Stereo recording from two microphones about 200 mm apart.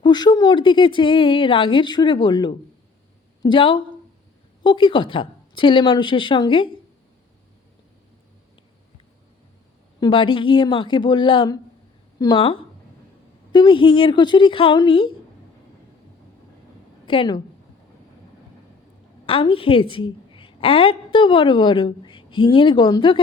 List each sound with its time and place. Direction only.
0.0 s a woman's voice: 20° left (ahead or behind)
10.0 s a woman's voice: 25° left (ahead or behind)
17.1 s a woman's voice: 25° left (ahead or behind)
19.2 s a woman's voice: 25° left (ahead or behind)